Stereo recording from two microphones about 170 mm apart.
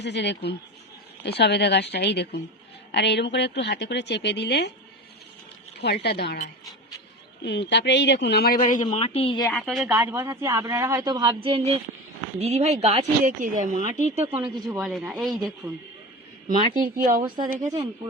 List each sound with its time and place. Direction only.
0.0 s a woman's voice: 90° left
2.9 s a woman's voice: 90° left
5.8 s speech: 75° left (ahead or behind)
7.4 s a woman's voice: 90° left; by 8.5 s 70° left (ahead or behind)
8.7 s speech: 45° left (ahead or behind)
9.5 s speech: centre (ahead or behind); by 14.1 s 45° right (ahead or behind)
14.2 s speech: 10° right (ahead or behind)
14.8 s speech: centre (ahead or behind)
16.7 s speech: 55° right (ahead or behind)
17.2 s a woman's voice: 25° right (ahead or behind)